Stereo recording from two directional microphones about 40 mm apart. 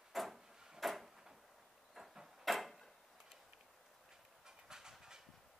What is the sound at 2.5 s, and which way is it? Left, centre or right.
Tick-tock, centre.